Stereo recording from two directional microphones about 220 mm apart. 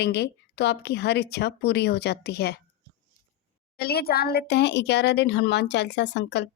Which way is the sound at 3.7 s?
45° left (ahead or behind).